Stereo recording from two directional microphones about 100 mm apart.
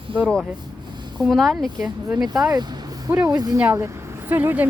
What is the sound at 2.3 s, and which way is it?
Speech, 40° right (ahead or behind).